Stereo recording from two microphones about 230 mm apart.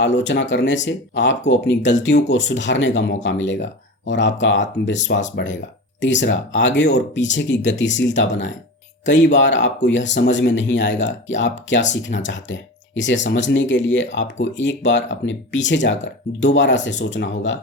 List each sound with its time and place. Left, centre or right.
0.0 s speech: left